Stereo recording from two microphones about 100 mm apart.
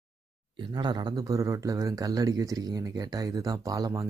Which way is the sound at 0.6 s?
50° right (ahead or behind).